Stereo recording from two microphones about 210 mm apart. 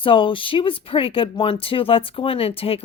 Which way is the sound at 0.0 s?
25° left (ahead or behind).